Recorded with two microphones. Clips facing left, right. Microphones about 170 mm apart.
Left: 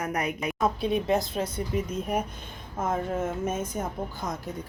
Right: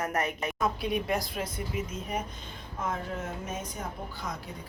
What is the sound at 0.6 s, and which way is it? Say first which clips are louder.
Speech: left 4 dB; 25° left (ahead or behind).